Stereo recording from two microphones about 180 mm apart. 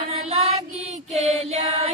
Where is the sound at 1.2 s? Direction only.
35° right (ahead or behind).